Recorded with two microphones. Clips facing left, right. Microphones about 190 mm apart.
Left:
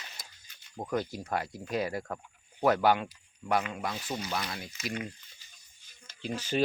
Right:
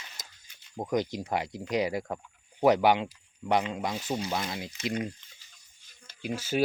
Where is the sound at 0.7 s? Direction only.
15° right (ahead or behind).